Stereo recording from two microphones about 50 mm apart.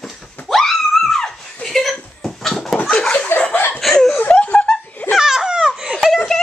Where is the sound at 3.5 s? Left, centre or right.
Left.